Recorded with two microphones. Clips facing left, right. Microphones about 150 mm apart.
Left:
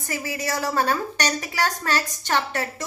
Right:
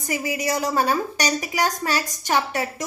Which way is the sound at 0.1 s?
15° right (ahead or behind).